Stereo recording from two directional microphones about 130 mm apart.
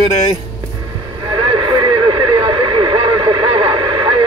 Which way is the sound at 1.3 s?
40° right (ahead or behind).